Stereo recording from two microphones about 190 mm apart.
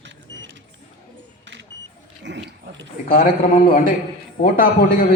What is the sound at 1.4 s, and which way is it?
Smoke detector, 70° right (ahead or behind).